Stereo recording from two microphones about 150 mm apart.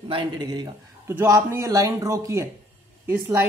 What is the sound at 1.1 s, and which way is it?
A man's voice, 15° right (ahead or behind).